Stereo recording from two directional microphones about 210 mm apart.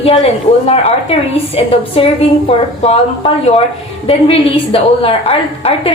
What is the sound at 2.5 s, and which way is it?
A woman's voice, 30° left (ahead or behind).